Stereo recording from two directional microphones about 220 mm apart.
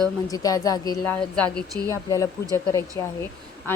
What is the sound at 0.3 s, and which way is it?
Speech, 15° left (ahead or behind).